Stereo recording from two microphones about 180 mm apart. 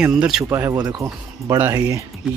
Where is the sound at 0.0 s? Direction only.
5° right (ahead or behind).